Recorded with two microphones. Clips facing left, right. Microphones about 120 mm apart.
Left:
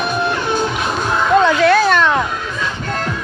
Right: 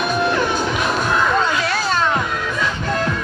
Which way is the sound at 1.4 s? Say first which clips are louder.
Left 8 dB; 65° left (ahead or behind).